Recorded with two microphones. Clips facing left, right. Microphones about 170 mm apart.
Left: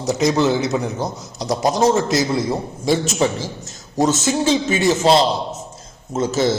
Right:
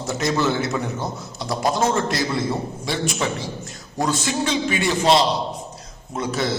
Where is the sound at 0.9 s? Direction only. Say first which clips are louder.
Left 3 dB; 40° left (ahead or behind).